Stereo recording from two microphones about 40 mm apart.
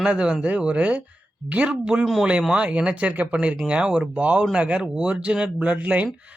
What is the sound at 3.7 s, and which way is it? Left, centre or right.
Speech, right.